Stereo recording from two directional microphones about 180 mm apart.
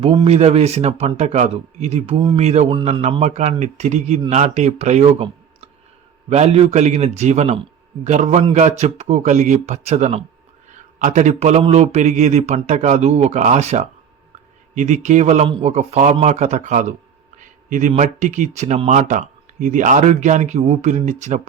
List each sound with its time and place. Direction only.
0.0 s speech: 30° right (ahead or behind)